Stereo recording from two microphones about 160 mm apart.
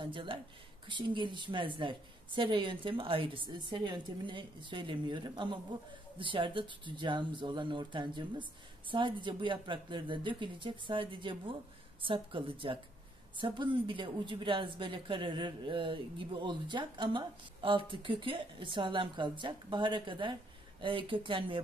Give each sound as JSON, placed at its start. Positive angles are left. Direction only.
{"t": 0.0, "sound": "a man's voice", "side_deg": -30}